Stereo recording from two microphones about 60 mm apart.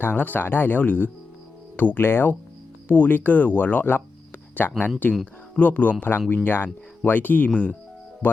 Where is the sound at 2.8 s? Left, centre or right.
Left.